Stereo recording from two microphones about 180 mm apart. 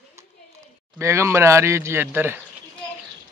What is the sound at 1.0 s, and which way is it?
A man's voice, 15° right (ahead or behind).